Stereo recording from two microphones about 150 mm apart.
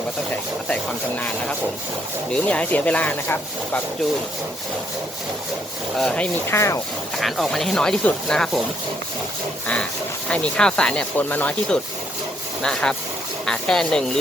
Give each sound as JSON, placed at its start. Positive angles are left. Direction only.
{"t": 0.7, "sound": "speech", "side_deg": 10}
{"t": 6.0, "sound": "speech", "side_deg": 5}
{"t": 6.5, "sound": "rub", "side_deg": 20}
{"t": 7.2, "sound": "speech", "side_deg": 0}
{"t": 10.2, "sound": "speech", "side_deg": 5}